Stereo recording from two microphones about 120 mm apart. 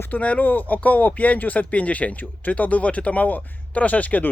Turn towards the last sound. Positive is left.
turn(degrees=15)  # may be behind; listen again after turning